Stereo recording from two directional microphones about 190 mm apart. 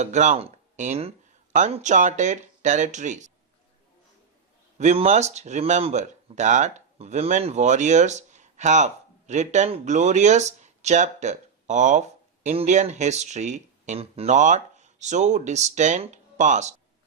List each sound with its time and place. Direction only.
0.0 s speech: 40° right (ahead or behind)
4.8 s speech: 35° right (ahead or behind)